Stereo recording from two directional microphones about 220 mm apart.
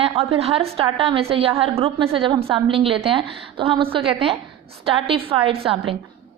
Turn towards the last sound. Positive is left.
turn(degrees=-25)  # may be behind; listen again after turning